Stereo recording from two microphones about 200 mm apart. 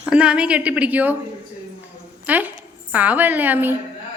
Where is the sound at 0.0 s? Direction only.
5° right (ahead or behind).